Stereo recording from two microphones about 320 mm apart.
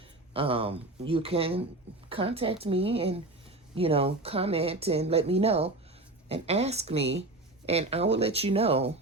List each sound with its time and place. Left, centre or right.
0.3 s speech: centre